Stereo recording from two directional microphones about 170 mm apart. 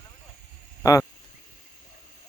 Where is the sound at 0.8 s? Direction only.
20° left (ahead or behind).